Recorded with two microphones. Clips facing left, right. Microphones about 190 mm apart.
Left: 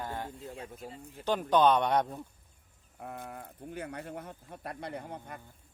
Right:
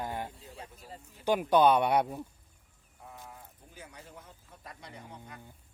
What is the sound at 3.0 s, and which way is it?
Speech, 65° left (ahead or behind).